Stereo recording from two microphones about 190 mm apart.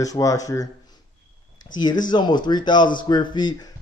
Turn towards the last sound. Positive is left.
turn(degrees=20)  # may be behind; listen again after turning